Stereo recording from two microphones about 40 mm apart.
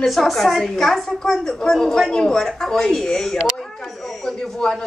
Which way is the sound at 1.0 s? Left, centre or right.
Centre.